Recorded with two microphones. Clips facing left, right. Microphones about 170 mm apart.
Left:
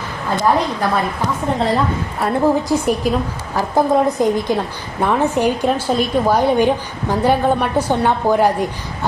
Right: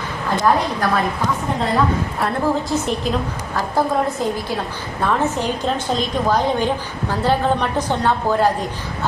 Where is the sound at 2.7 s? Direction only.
10° left (ahead or behind).